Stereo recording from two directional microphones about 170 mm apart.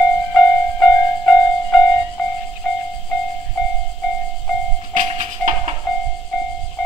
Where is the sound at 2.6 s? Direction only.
5° left (ahead or behind).